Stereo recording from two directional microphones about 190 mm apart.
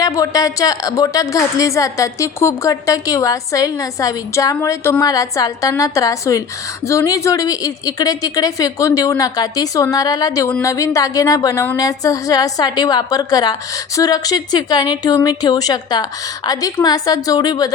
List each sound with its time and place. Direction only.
0.0 s a woman's voice: 20° left (ahead or behind)